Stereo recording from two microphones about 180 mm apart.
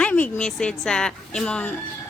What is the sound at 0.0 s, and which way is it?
A woman's voice, 5° left (ahead or behind).